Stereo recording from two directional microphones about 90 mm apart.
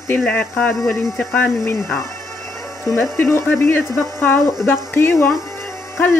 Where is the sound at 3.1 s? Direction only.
25° left (ahead or behind).